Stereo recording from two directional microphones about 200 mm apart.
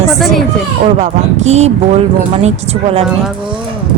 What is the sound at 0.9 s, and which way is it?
A woman's voice, 35° right (ahead or behind).